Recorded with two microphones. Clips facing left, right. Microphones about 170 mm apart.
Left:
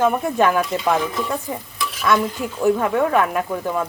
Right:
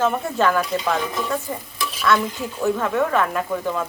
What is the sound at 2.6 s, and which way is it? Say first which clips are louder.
Speech: left 3 dB; 10° left (ahead or behind).